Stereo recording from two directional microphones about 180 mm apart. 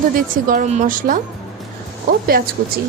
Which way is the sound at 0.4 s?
45° right (ahead or behind).